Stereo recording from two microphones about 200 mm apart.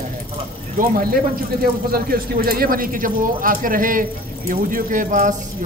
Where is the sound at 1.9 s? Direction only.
50° right (ahead or behind).